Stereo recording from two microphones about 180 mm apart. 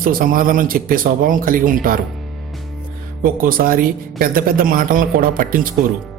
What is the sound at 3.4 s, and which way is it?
A man's voice, 50° right (ahead or behind).